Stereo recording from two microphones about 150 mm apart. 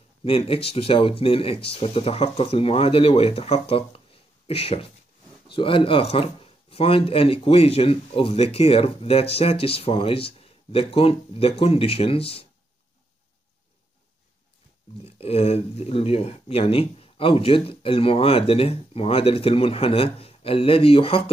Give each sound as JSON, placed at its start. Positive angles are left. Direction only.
{"t": 0.2, "sound": "speech", "side_deg": 40}
{"t": 15.0, "sound": "speech", "side_deg": 40}